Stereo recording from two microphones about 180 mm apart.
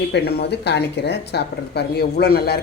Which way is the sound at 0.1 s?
65° left (ahead or behind).